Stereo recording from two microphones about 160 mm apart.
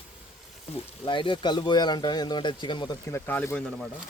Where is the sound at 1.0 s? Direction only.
30° left (ahead or behind); by 3.9 s 10° left (ahead or behind).